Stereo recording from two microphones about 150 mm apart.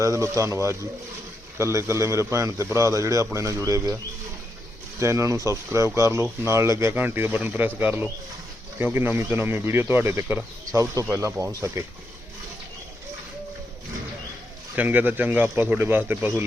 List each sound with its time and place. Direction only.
0.0 s a man's voice: 20° right (ahead or behind)
4.9 s a man's voice: 20° right (ahead or behind)
14.8 s speech: 10° right (ahead or behind)